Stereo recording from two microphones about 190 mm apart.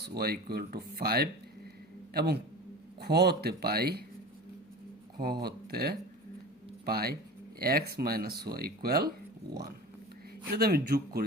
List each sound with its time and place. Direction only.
0.0 s speech: 55° right (ahead or behind)
5.1 s speech: 55° right (ahead or behind)
10.5 s speech: 55° right (ahead or behind)